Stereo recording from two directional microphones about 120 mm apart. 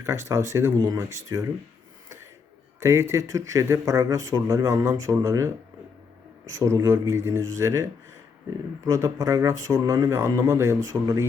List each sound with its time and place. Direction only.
0.0 s speech: 25° right (ahead or behind)
2.8 s speech: 25° right (ahead or behind)
6.6 s speech: 25° right (ahead or behind)